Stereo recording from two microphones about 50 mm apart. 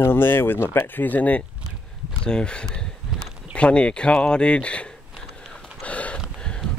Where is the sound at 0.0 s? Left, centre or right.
Left.